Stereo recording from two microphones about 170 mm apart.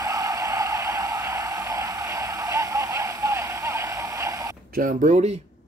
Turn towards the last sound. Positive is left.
turn(degrees=-40)  # may be behind; listen again after turning